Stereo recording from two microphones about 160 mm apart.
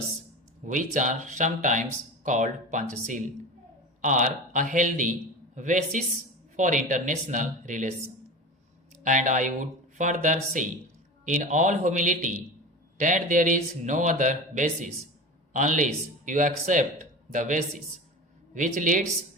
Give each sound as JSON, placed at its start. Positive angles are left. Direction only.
{"t": 0.6, "sound": "speech", "side_deg": -50}
{"t": 9.0, "sound": "speech", "side_deg": -55}